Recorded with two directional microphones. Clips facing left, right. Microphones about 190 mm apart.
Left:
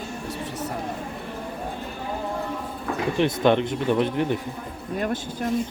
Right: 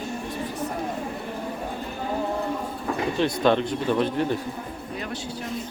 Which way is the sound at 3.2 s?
20° left (ahead or behind).